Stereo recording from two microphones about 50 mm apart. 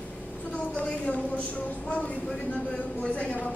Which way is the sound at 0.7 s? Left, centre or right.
Left.